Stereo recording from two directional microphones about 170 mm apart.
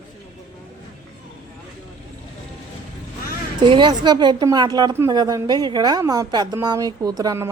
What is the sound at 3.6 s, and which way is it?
A woman's voice, 30° right (ahead or behind).